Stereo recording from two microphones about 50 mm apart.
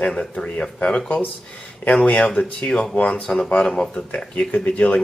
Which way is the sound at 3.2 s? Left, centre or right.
Centre.